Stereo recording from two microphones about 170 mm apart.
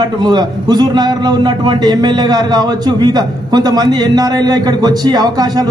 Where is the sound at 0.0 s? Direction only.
25° right (ahead or behind).